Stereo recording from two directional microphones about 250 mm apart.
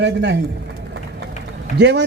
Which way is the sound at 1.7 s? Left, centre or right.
Right.